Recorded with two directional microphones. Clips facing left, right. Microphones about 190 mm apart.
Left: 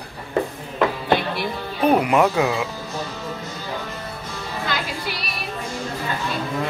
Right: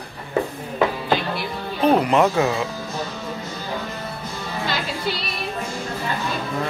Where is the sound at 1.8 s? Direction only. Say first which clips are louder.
Even; 10° left (ahead or behind).